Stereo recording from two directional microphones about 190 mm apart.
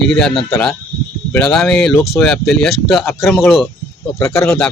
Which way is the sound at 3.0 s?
10° left (ahead or behind).